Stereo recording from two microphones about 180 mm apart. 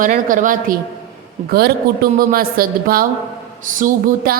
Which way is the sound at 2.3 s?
55° right (ahead or behind).